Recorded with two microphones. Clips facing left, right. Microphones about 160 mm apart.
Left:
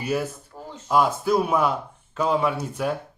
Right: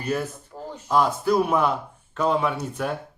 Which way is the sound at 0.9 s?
5° left (ahead or behind).